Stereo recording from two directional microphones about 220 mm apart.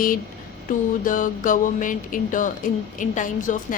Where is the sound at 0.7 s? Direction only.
35° left (ahead or behind).